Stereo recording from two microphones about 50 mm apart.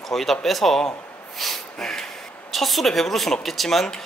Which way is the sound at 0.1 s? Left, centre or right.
Centre.